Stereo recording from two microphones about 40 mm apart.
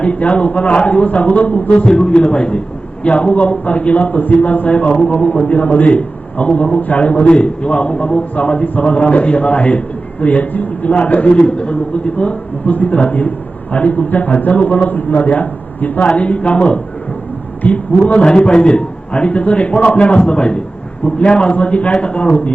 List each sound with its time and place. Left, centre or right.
0.0 s a man's voice: left
1.8 s a man's voice: centre; by 7.3 s left
7.3 s a man's voice: left
12.7 s a man's voice: left
16.0 s a man's voice: left
17.6 s a man's voice: left
18.1 s a man's voice: left